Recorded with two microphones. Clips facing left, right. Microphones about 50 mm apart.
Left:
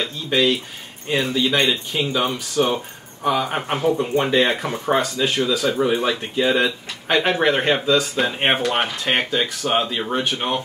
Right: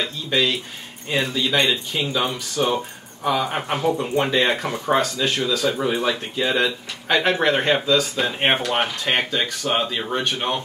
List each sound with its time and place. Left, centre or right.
0.0 s speech: centre
2.6 s speech: centre
3.3 s speech: centre
5.0 s speech: centre
5.4 s speech: centre